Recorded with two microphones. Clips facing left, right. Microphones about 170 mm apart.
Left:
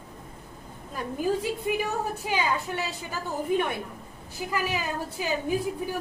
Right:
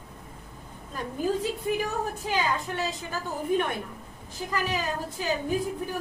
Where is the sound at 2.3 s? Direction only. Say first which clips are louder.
Even; 10° left (ahead or behind).